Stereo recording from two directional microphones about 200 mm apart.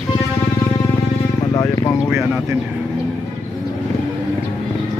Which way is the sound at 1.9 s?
5° right (ahead or behind).